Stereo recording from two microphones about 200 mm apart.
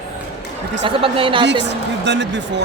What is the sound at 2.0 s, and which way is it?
Speech, 60° right (ahead or behind).